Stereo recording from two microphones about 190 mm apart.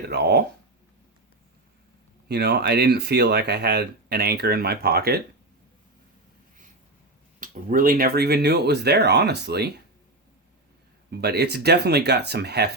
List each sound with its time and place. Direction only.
0.1 s speech: 60° right (ahead or behind)
2.2 s speech: 60° right (ahead or behind)
7.3 s speech: 45° right (ahead or behind)
11.1 s speech: 55° right (ahead or behind)